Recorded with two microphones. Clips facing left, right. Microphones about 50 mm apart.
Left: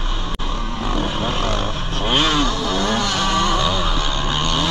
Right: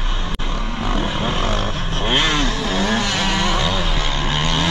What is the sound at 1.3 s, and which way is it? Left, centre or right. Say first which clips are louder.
Vehicle: even; right.